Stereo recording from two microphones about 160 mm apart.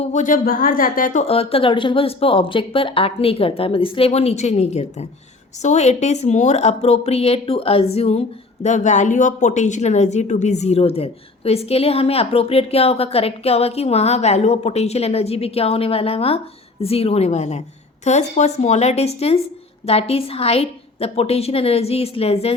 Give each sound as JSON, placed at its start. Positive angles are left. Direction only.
{"t": 0.0, "sound": "a woman's voice", "side_deg": 50}